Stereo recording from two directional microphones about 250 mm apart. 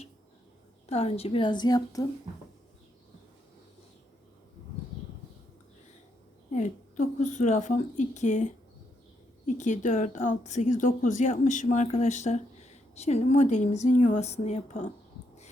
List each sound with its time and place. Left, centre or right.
0.9 s speech: left
6.5 s speech: left